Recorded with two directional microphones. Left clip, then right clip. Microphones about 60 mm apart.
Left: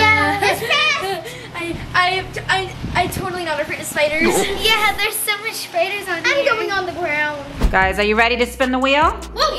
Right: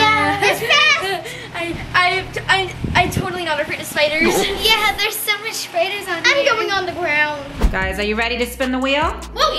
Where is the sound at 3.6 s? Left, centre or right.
Centre.